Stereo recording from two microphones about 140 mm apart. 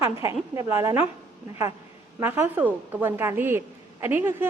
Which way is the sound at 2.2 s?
15° right (ahead or behind).